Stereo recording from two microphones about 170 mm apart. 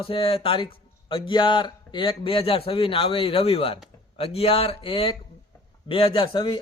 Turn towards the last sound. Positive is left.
turn(degrees=30)  # may be behind; listen again after turning